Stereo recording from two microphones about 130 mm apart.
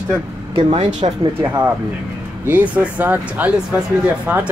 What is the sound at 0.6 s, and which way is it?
Speech, 45° right (ahead or behind).